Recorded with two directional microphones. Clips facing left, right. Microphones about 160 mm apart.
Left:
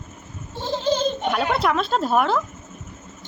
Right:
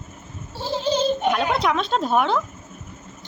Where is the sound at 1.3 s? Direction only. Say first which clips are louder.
Even; 5° left (ahead or behind).